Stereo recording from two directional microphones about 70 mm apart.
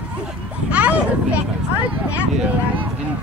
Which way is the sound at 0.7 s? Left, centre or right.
Centre.